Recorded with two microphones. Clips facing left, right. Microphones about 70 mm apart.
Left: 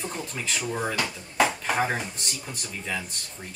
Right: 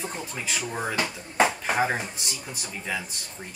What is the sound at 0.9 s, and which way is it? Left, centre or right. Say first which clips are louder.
Speech: even; right.